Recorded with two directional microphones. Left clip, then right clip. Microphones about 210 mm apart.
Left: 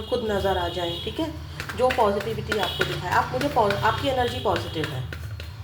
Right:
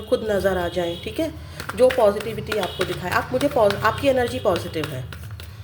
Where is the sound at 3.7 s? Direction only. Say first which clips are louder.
Right 3 dB; 40° right (ahead or behind).